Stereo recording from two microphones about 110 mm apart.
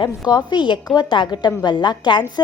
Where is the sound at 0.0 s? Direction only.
40° left (ahead or behind).